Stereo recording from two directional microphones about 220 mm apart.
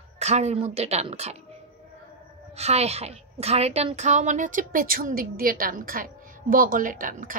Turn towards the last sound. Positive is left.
turn(degrees=-35)  # may be behind; listen again after turning